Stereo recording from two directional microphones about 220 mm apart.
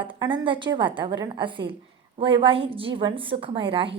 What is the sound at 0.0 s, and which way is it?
A woman's voice, 20° right (ahead or behind).